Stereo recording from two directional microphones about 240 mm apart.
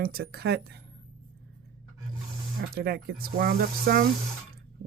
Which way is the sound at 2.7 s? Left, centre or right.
Right.